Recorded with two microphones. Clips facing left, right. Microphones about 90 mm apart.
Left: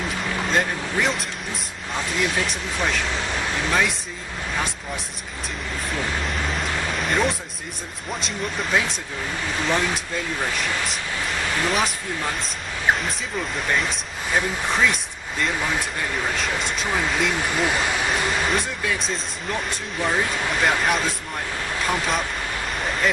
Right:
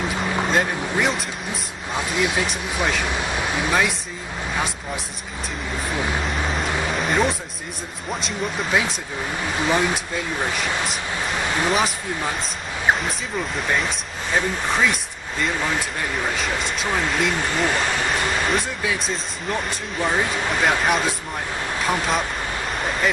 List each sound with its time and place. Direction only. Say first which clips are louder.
0.5 s speech: left 1 dB; 5° right (ahead or behind)
6.2 s a sound: right 2 dB; centre (ahead or behind)
6.8 s music: right 2 dB; centre (ahead or behind)
8.1 s speech: right 2 dB; centre (ahead or behind)
11.7 s speech: right 2 dB; centre (ahead or behind)